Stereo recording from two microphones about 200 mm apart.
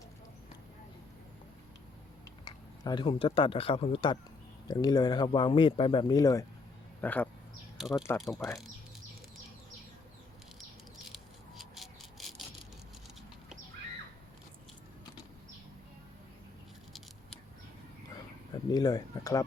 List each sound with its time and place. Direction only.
2.4 s speech: 20° left (ahead or behind)
7.8 s speech: centre (ahead or behind)
11.1 s a sound: centre (ahead or behind)
18.5 s speech: 20° left (ahead or behind)